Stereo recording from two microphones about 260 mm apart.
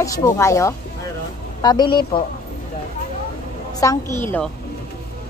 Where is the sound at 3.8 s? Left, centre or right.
Centre.